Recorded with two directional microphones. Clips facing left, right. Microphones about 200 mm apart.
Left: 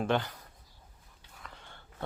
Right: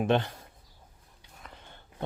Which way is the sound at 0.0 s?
25° right (ahead or behind).